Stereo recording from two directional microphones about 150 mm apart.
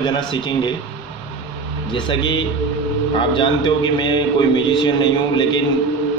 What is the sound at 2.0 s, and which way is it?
A man's voice, 30° left (ahead or behind).